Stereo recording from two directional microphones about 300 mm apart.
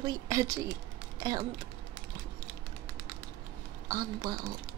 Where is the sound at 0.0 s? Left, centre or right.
Centre.